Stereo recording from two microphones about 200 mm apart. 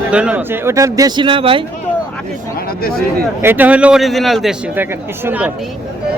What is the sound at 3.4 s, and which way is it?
A man's voice, 10° right (ahead or behind).